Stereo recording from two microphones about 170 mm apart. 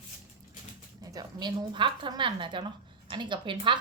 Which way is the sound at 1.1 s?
25° right (ahead or behind).